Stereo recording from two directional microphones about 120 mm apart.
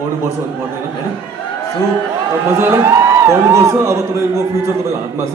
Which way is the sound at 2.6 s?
20° right (ahead or behind).